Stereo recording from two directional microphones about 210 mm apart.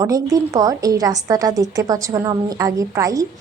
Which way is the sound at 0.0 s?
15° right (ahead or behind).